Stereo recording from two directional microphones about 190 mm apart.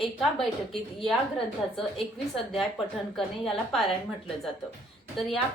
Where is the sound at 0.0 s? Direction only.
Centre (ahead or behind).